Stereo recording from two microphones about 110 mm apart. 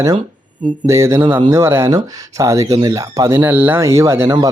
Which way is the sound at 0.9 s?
25° right (ahead or behind).